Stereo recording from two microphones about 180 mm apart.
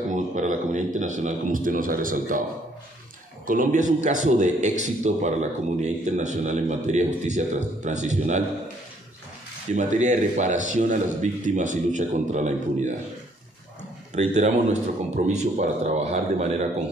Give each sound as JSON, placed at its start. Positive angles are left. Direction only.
{"t": 0.1, "sound": "a man's voice", "side_deg": -45}
{"t": 3.4, "sound": "a man's voice", "side_deg": -45}
{"t": 9.8, "sound": "a man's voice", "side_deg": -40}
{"t": 14.1, "sound": "a man's voice", "side_deg": -40}